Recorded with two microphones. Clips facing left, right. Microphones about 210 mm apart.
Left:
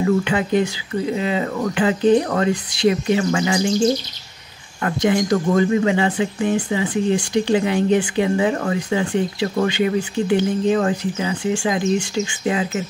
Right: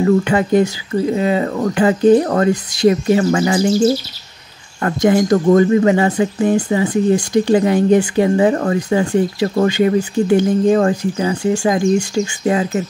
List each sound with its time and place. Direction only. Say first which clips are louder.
0.2 s speech: right 5 dB; 45° right (ahead or behind)
3.6 s speech: right 4 dB; 5° right (ahead or behind)
4.8 s speech: right 5 dB; 45° right (ahead or behind)